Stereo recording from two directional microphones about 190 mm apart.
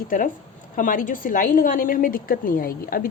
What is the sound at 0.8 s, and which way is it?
A woman's voice, 45° left (ahead or behind).